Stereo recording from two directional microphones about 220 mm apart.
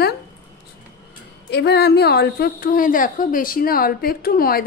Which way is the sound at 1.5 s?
50° left (ahead or behind).